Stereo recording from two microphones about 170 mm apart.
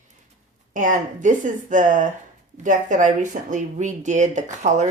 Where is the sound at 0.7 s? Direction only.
50° right (ahead or behind).